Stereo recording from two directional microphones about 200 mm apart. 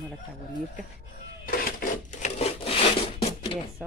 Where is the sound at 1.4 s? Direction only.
45° left (ahead or behind); by 2.9 s 30° left (ahead or behind).